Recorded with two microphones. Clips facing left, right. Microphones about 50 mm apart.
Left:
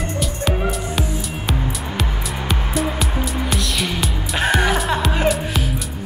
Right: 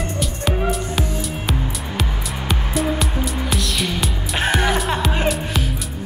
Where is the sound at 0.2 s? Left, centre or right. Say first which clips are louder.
Even; centre.